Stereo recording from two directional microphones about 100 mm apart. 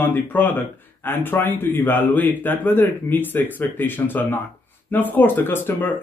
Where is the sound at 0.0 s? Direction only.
20° left (ahead or behind).